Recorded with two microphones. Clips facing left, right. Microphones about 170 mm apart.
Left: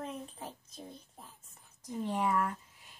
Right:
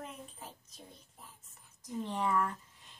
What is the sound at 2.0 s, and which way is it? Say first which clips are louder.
Speech: left 3 dB; 10° left (ahead or behind).